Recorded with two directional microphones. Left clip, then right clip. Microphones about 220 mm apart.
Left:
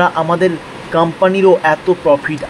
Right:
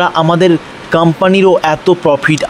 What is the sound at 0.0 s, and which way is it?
Speech, 45° right (ahead or behind).